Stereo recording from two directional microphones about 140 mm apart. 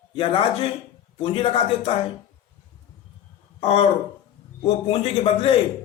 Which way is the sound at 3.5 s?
40° left (ahead or behind).